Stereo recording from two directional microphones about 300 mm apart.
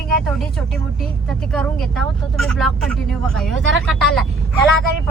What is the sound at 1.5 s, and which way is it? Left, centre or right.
Speech, centre.